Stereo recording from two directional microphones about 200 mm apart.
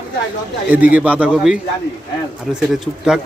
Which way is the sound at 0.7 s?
5° right (ahead or behind).